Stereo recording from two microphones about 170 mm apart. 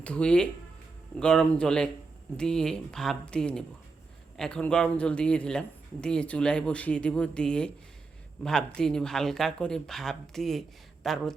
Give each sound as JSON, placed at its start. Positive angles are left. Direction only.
{"t": 0.0, "sound": "speech", "side_deg": 5}